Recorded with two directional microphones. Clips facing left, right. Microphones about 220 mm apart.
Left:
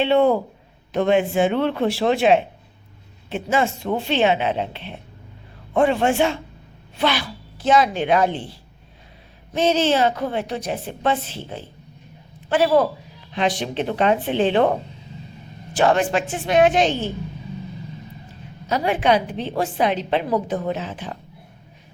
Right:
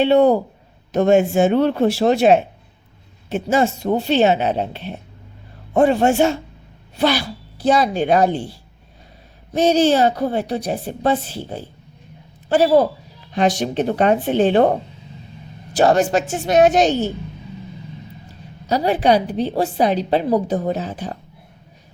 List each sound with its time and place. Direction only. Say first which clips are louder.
0.0 s a woman's voice: right 3 dB; 40° right (ahead or behind)
9.6 s a woman's voice: right 4 dB; 40° right (ahead or behind)
15.7 s a woman's voice: right 3 dB; 40° right (ahead or behind)
18.7 s a woman's voice: right 3 dB; 35° right (ahead or behind)